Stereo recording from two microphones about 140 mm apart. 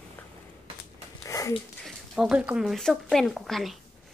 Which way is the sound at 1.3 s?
20° left (ahead or behind).